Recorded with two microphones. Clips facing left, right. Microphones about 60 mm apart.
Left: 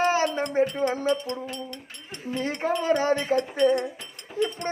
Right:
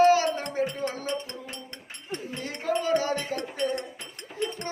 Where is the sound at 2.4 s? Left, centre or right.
Left.